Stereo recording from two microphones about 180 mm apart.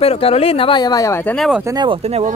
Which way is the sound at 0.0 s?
35° left (ahead or behind).